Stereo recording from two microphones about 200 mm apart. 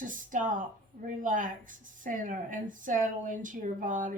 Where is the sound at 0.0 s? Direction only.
40° right (ahead or behind).